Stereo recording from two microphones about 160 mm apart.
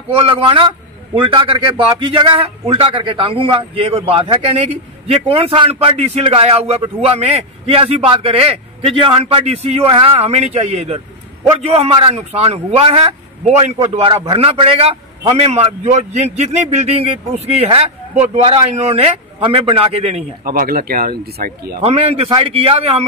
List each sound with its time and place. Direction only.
0.1 s a man's voice: 35° right (ahead or behind)
20.4 s speech: 65° right (ahead or behind)
21.8 s a man's voice: 40° right (ahead or behind)